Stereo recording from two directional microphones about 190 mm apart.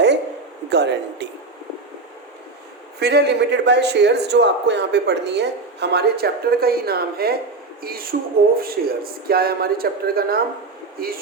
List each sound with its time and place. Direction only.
0.7 s a man's voice: 65° right (ahead or behind)
3.0 s a man's voice: 60° right (ahead or behind)